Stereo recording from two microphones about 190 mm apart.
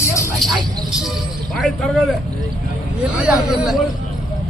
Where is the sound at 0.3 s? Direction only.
Centre (ahead or behind).